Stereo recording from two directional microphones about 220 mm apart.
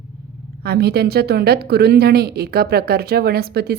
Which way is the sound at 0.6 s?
45° right (ahead or behind).